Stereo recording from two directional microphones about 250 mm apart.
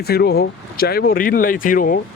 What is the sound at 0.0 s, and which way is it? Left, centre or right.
Speech, left.